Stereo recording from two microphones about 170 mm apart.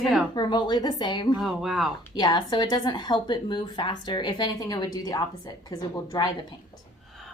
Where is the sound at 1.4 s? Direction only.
Centre (ahead or behind).